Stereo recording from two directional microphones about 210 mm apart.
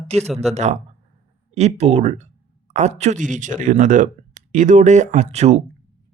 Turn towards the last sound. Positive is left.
turn(degrees=-30)  # may be behind; listen again after turning